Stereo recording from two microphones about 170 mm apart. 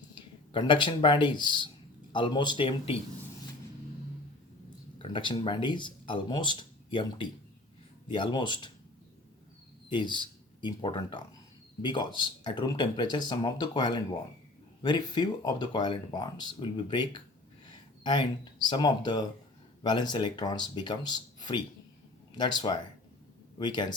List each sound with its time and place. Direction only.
0.1 s speech: 30° left (ahead or behind)
4.9 s speech: 30° left (ahead or behind)
9.9 s speech: 30° left (ahead or behind)